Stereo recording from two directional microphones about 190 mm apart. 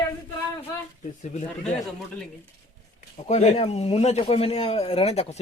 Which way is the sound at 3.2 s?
35° left (ahead or behind).